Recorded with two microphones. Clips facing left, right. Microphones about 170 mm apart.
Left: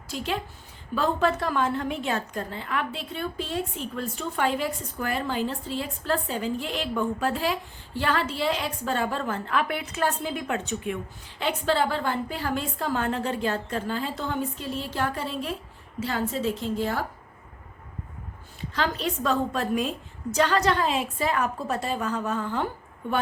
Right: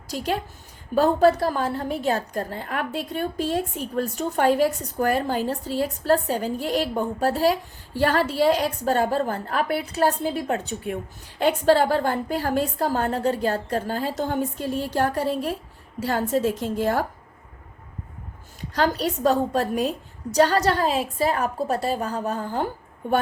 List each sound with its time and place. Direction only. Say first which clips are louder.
0.1 s a woman's voice: right 4 dB; 40° right (ahead or behind)
18.7 s a woman's voice: right 5 dB; 40° right (ahead or behind)